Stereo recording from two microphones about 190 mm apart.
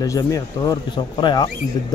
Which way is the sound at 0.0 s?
15° left (ahead or behind).